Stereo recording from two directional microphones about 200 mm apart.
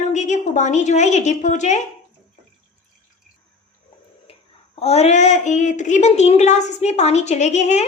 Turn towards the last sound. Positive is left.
turn(degrees=35)  # may be behind; listen again after turning